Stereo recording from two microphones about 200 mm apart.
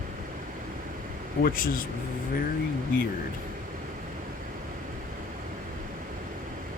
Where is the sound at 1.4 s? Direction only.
45° left (ahead or behind).